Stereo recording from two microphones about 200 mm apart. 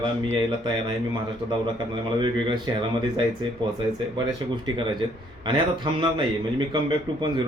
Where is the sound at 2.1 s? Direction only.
25° right (ahead or behind).